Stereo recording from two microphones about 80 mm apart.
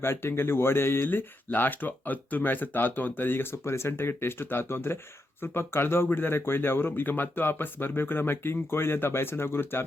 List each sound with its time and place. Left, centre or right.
0.0 s speech: left